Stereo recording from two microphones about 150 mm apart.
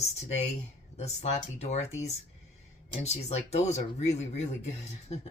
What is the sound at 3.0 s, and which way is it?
Speech, 45° left (ahead or behind).